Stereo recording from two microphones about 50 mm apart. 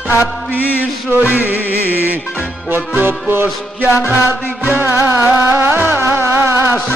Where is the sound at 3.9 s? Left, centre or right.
Left.